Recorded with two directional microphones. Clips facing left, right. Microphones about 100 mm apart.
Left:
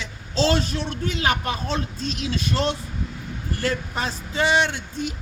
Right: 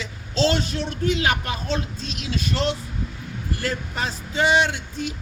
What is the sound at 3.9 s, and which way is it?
Speech, 35° left (ahead or behind).